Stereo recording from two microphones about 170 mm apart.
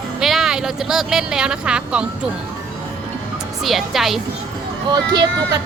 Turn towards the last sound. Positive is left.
turn(degrees=-25)  # may be behind; listen again after turning